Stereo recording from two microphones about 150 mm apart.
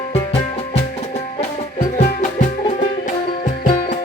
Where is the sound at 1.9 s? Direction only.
55° left (ahead or behind).